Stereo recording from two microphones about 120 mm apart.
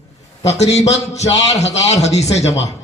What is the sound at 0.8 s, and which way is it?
A man's voice, 65° left (ahead or behind).